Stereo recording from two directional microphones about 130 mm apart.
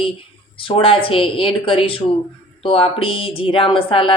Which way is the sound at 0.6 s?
45° left (ahead or behind).